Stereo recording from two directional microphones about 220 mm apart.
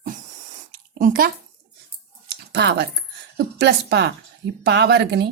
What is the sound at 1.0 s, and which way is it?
Speech, 40° right (ahead or behind).